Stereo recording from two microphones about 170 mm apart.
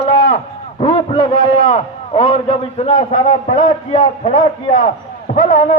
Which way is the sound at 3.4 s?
50° left (ahead or behind).